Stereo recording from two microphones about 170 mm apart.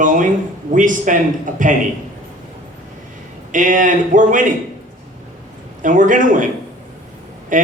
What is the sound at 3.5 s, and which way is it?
Speech, 50° right (ahead or behind).